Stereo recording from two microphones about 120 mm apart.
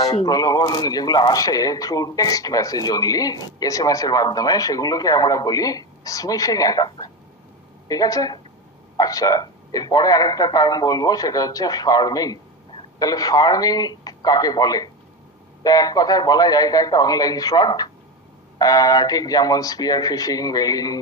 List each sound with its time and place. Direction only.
0.0 s a man's voice: 35° left (ahead or behind)